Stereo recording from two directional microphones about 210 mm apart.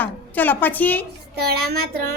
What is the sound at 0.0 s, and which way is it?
A woman's voice, 10° left (ahead or behind).